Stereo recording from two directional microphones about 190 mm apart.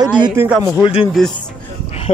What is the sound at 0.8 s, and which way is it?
Speech, 25° left (ahead or behind).